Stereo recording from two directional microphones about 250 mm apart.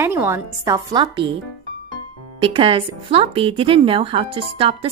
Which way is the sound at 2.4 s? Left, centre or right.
Right.